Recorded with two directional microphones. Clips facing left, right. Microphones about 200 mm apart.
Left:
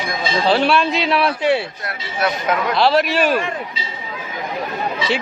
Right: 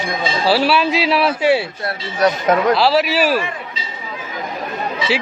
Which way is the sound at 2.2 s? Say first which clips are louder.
Right 5 dB; 40° right (ahead or behind).